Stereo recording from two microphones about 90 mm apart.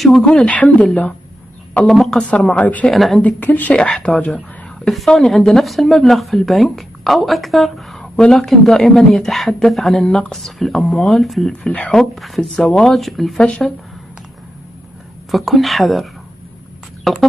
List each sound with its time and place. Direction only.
0.0 s speech: 5° left (ahead or behind)
1.9 s speech: 5° left (ahead or behind)
2.9 s speech: centre (ahead or behind)
3.2 s speech: 20° left (ahead or behind)
3.7 s speech: 10° left (ahead or behind)
4.8 s speech: 5° left (ahead or behind)
15.3 s speech: centre (ahead or behind)